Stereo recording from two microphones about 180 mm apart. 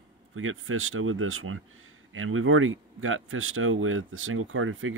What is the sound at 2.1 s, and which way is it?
Speech, 90° right.